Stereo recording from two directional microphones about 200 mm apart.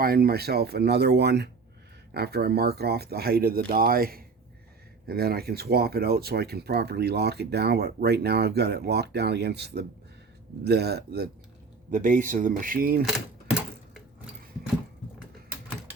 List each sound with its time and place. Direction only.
0.0 s speech: 50° right (ahead or behind)
11.9 s speech: 40° right (ahead or behind)
13.1 s typewriter: centre (ahead or behind)